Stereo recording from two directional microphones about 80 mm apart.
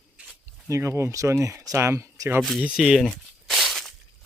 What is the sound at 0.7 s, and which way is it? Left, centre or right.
Speech, right.